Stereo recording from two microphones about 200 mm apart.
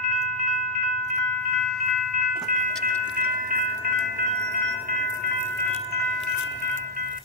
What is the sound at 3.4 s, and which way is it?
Wind chime, 50° right (ahead or behind).